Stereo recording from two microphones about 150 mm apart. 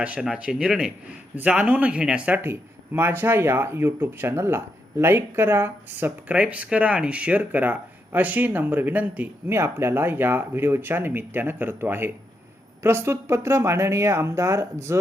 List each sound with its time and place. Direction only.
0.0 s speech: 5° right (ahead or behind)